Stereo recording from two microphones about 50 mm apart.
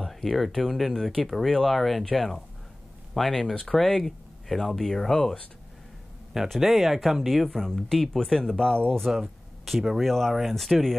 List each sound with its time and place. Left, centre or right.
0.0 s speech: centre
6.5 s speech: centre
8.4 s speech: centre
9.7 s speech: centre